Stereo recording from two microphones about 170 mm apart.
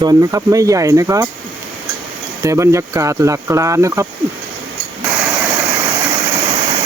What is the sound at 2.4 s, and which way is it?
Speech, 20° right (ahead or behind).